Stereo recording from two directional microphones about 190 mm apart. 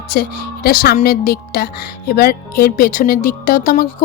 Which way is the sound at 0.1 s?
55° left (ahead or behind).